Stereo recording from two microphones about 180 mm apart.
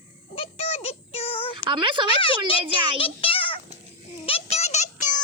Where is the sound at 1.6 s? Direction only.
25° right (ahead or behind).